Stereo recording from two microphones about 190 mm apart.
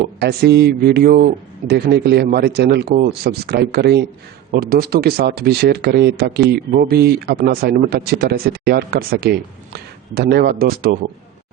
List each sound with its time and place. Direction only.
0.2 s speech: 60° right (ahead or behind)